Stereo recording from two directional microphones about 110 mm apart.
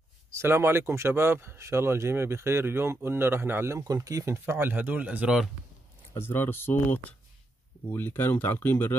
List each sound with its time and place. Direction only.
0.3 s speech: 25° right (ahead or behind)
6.1 s speech: 20° left (ahead or behind)